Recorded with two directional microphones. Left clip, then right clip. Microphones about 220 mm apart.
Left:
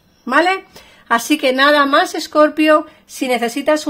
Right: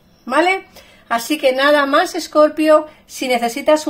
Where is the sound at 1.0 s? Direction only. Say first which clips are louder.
Left 1 dB; 40° left (ahead or behind).